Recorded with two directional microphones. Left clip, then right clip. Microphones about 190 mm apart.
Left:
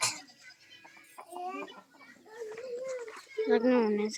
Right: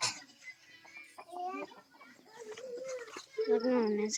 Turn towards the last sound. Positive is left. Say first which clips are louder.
# left 4 dB
turn(degrees=20)  # may be behind; listen again after turning